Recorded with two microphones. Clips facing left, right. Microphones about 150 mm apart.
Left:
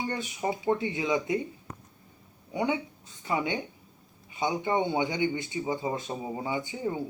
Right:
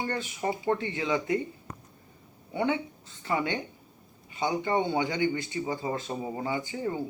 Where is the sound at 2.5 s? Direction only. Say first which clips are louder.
Right 1 dB; 15° left (ahead or behind).